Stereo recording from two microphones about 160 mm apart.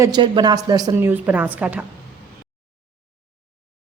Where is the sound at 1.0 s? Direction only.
10° right (ahead or behind).